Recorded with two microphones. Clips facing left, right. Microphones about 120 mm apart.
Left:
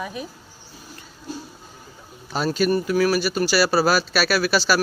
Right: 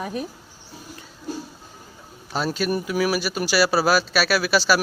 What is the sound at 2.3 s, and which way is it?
Speech, centre (ahead or behind).